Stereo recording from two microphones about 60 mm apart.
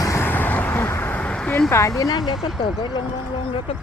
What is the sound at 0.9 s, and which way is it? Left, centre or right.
Vehicle, left.